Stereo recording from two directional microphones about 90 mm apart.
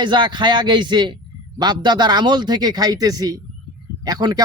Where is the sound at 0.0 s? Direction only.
60° right (ahead or behind).